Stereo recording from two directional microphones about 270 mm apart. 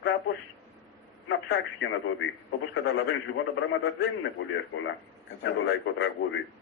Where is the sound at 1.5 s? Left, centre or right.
Left.